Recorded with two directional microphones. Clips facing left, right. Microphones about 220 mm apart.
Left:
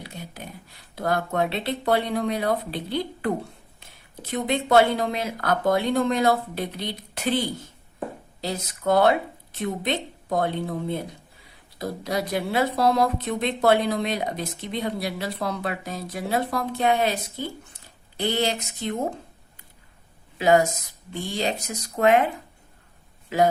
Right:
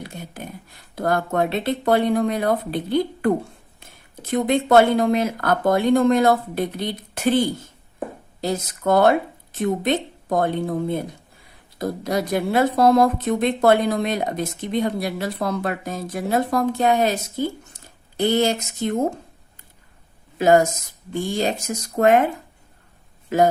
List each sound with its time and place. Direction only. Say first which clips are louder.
0.0 s a sound: right 4 dB; 50° right (ahead or behind)
0.9 s a woman's voice: right 3 dB; 50° right (ahead or behind)
20.4 s a woman's voice: right 3 dB; 45° right (ahead or behind)
23.3 s a woman's voice: right 3 dB; 45° right (ahead or behind)